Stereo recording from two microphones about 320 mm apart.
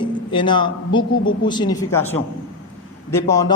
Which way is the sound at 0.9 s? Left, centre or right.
Centre.